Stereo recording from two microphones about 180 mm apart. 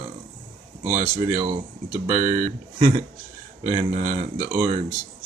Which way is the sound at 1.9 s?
45° right (ahead or behind).